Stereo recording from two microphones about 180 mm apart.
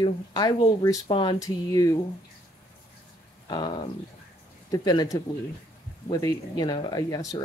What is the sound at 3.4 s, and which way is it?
Speech, 25° left (ahead or behind).